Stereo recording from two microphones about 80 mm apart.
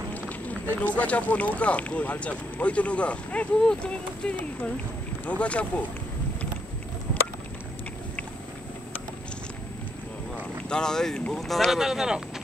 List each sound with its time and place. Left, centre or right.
0.1 s a sound: centre
1.6 s speech: centre
10.3 s speech: centre